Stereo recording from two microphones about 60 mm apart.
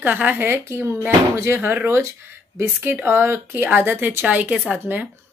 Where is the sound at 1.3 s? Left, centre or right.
Right.